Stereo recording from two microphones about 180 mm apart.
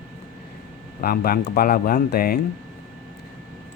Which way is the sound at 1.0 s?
55° left (ahead or behind).